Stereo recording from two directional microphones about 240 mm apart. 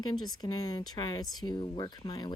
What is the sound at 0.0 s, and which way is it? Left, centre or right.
Speech, centre.